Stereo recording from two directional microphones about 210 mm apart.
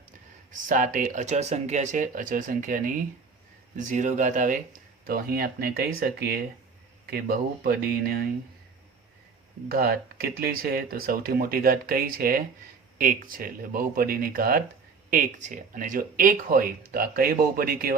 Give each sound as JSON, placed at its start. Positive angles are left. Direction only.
{"t": 0.5, "sound": "speech", "side_deg": -40}
{"t": 9.6, "sound": "speech", "side_deg": -45}